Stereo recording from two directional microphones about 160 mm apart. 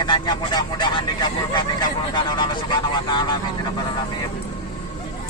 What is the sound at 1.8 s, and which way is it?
Vehicle, 30° left (ahead or behind).